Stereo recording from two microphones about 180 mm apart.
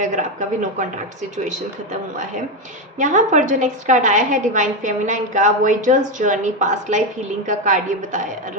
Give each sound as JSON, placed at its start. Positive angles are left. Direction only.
{"t": 0.0, "sound": "a woman's voice", "side_deg": -45}